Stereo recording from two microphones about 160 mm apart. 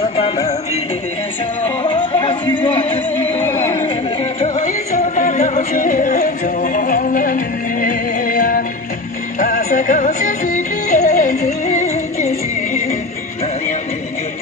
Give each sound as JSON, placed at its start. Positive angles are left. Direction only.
{"t": 1.6, "sound": "music", "side_deg": 40}
{"t": 4.6, "sound": "music", "side_deg": 50}